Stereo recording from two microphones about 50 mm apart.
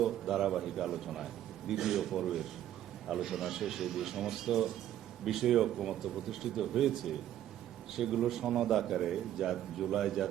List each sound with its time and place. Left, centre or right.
0.0 s a man's voice: centre